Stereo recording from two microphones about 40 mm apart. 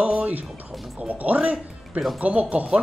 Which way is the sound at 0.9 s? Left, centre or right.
Right.